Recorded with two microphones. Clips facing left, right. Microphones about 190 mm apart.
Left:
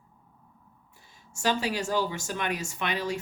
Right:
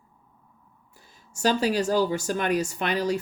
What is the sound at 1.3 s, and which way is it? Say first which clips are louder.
Speech: right 5 dB; 40° right (ahead or behind).